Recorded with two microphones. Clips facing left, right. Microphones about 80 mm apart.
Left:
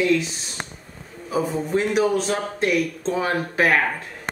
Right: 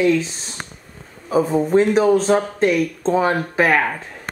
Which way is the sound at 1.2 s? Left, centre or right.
Right.